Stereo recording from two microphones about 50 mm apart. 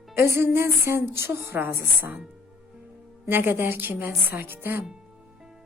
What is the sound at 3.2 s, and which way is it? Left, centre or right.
A woman's voice, right.